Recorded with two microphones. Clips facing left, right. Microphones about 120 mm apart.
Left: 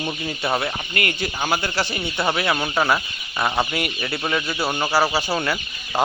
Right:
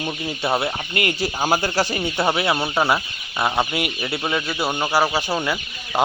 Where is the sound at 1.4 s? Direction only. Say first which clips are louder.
Right 3 dB; 40° right (ahead or behind).